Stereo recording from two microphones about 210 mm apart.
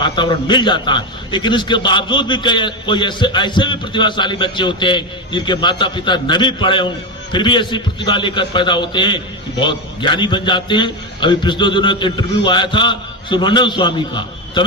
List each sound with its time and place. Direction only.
0.0 s a man's voice: 20° left (ahead or behind)